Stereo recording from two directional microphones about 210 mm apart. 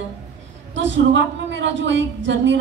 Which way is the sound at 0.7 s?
60° right (ahead or behind).